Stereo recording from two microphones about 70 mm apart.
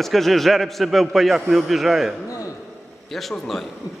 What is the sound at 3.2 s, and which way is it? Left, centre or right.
Speech, centre.